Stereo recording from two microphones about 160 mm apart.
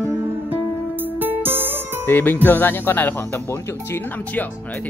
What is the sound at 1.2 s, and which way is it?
Music, 10° right (ahead or behind).